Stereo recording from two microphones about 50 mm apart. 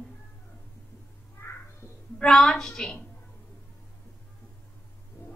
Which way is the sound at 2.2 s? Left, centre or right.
Centre.